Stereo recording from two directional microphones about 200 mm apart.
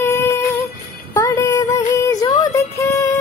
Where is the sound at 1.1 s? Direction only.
15° left (ahead or behind).